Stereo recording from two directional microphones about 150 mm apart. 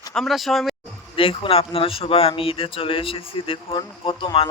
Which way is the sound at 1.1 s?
40° left (ahead or behind).